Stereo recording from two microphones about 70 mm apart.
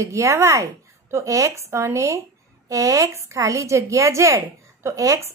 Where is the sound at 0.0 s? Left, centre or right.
Right.